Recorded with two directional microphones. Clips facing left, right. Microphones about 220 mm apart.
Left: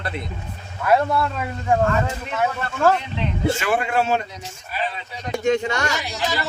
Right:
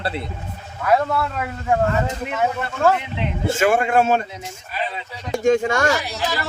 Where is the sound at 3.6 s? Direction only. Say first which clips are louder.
Right 5 dB; 50° right (ahead or behind).